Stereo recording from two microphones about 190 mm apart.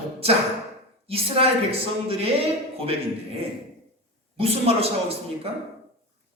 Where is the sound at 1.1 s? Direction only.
30° right (ahead or behind).